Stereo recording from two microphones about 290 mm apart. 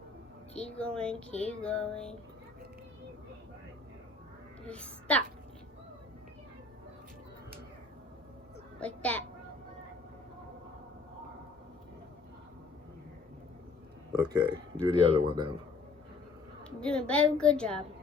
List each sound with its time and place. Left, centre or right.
0.5 s speech: centre
4.6 s a child's voice: centre
8.8 s a child's voice: centre
14.5 s speech: centre
16.6 s speech: centre